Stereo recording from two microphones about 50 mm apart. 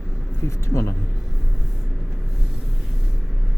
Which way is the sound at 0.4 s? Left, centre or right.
Left.